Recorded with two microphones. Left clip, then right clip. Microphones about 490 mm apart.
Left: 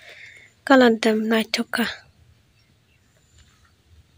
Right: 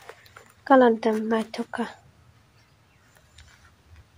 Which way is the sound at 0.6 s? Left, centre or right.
Left.